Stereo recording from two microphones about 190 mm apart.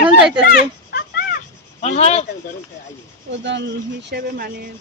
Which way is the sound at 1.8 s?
35° left (ahead or behind).